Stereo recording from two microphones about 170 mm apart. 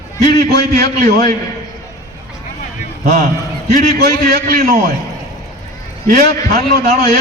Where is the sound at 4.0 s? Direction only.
70° right (ahead or behind).